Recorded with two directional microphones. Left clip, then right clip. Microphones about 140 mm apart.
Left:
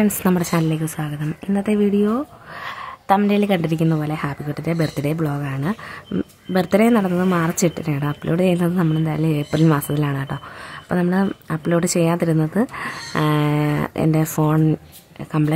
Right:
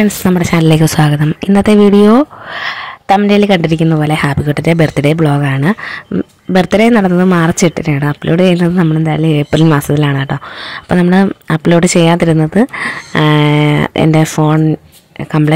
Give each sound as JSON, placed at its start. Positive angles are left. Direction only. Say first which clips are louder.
{"t": 0.0, "sound": "speech", "louder": "right 7 dB", "side_deg": -30}
{"t": 0.6, "sound": "speech", "louder": "right 13 dB", "side_deg": -60}
{"t": 2.5, "sound": "a sound", "louder": "right 11 dB", "side_deg": -40}
{"t": 3.3, "sound": "speech", "louder": "right 10 dB", "side_deg": -35}
{"t": 6.5, "sound": "speech", "louder": "right 8 dB", "side_deg": -35}